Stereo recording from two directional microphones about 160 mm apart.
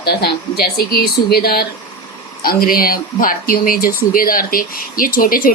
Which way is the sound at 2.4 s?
65° left (ahead or behind).